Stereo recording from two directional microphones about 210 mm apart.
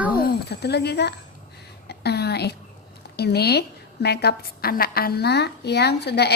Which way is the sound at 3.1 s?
50° left (ahead or behind).